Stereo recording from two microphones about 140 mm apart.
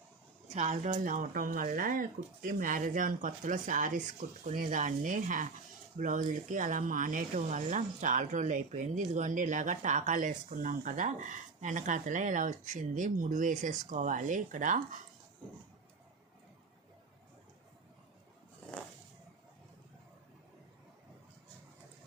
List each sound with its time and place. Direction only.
0.4 s speech: 55° right (ahead or behind)
0.9 s speech: 70° right (ahead or behind)